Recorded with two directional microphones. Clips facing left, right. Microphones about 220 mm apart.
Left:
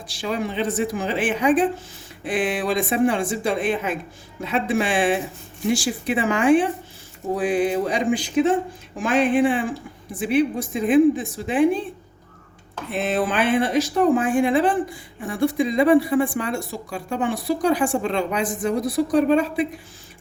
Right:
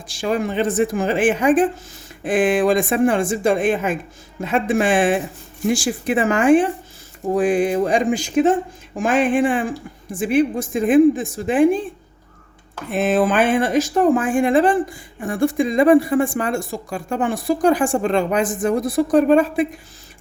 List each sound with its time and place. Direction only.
0.1 s speech: 50° right (ahead or behind)
12.9 s speech: 50° right (ahead or behind)